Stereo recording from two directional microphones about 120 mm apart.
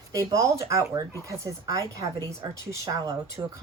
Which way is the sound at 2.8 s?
30° right (ahead or behind).